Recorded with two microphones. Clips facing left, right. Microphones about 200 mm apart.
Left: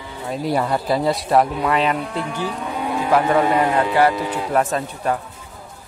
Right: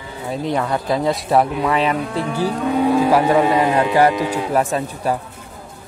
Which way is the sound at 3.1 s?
15° right (ahead or behind).